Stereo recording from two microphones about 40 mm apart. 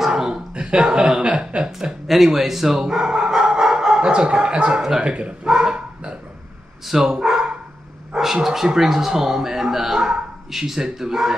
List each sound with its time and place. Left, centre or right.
0.0 s a sound: centre
1.3 s speech: right
2.0 s speech: centre
3.0 s dog: centre
5.0 s speech: right
5.5 s speech: centre